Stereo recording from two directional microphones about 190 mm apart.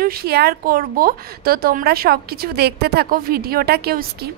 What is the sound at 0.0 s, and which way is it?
A woman's voice, 55° right (ahead or behind).